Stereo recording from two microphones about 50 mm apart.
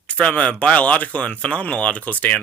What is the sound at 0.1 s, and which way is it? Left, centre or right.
Speech, left.